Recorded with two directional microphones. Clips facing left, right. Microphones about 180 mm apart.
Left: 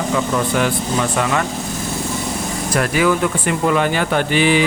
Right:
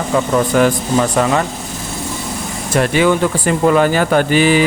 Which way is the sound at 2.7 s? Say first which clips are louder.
Right 4 dB; 25° right (ahead or behind).